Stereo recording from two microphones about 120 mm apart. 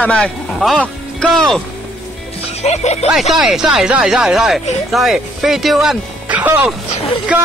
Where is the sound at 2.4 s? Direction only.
70° left (ahead or behind).